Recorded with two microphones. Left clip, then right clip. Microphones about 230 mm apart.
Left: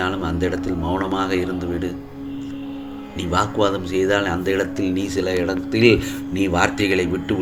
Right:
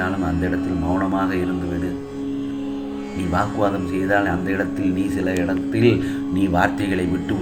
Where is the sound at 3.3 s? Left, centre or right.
Left.